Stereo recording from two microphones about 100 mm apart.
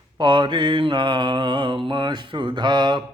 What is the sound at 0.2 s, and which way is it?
Mantra, 50° right (ahead or behind).